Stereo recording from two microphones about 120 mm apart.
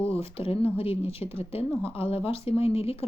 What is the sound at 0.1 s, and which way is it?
Speech, 55° left (ahead or behind).